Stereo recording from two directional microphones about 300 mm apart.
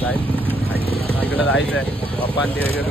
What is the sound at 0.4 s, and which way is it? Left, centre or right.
Vehicle, centre.